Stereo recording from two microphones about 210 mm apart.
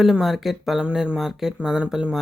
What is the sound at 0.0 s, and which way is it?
Speech, centre (ahead or behind).